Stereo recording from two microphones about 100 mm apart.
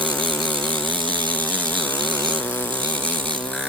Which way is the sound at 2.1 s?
15° left (ahead or behind).